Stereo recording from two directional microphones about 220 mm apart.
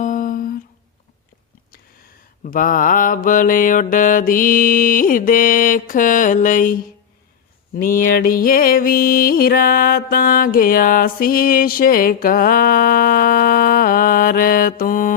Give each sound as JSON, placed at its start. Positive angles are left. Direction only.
{"t": 0.0, "sound": "humming", "side_deg": 35}
{"t": 2.4, "sound": "mantra", "side_deg": 35}
{"t": 7.8, "sound": "music", "side_deg": 40}